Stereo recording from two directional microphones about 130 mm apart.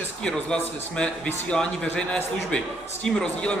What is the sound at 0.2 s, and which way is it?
A man's voice, 5° left (ahead or behind).